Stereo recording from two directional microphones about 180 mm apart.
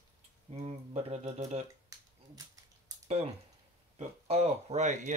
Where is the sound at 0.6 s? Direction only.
35° right (ahead or behind).